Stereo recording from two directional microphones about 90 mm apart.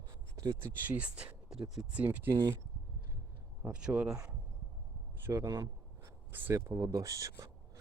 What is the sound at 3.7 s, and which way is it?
Speech, 15° right (ahead or behind).